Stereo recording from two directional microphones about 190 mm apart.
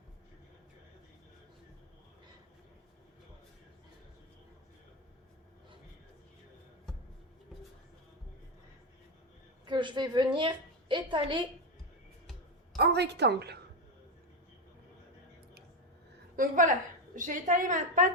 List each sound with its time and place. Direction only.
9.6 s a woman's voice: 25° right (ahead or behind)
12.7 s a woman's voice: 60° right (ahead or behind)
16.3 s a sound: 45° right (ahead or behind)
17.2 s a woman's voice: 45° right (ahead or behind)